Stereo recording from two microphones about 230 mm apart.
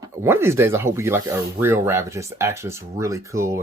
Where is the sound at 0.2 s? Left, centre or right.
Centre.